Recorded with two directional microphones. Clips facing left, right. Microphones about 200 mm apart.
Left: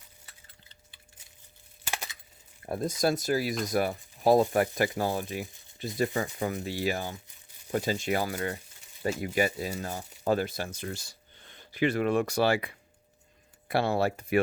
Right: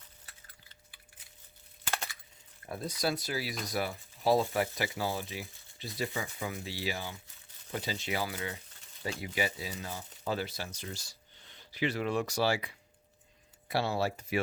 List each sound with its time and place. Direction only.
2.6 s speech: 45° left (ahead or behind)